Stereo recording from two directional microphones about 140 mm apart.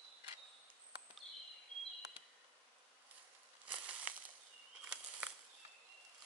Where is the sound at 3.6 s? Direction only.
10° right (ahead or behind).